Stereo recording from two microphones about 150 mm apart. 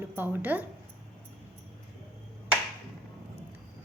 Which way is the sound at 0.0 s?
15° right (ahead or behind).